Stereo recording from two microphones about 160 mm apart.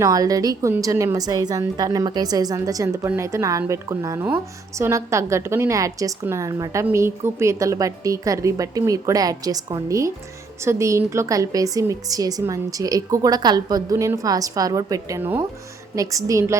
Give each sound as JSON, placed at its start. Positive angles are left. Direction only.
{"t": 0.0, "sound": "a woman's voice", "side_deg": -20}